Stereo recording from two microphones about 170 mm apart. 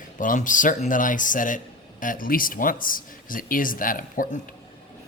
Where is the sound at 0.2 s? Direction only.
50° left (ahead or behind).